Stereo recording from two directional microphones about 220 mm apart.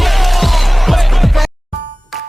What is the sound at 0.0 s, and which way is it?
Music, centre (ahead or behind).